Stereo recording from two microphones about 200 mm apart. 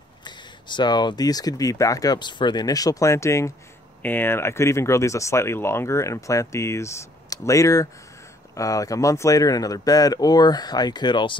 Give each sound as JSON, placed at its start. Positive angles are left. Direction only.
{"t": 0.2, "sound": "speech", "side_deg": 20}